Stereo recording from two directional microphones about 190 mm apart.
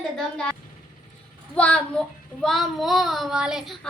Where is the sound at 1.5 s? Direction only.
5° left (ahead or behind).